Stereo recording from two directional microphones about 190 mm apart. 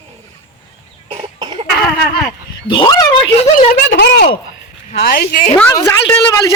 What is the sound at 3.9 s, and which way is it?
Speech, 65° left (ahead or behind).